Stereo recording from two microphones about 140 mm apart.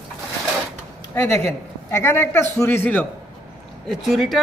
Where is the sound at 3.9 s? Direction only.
Centre (ahead or behind).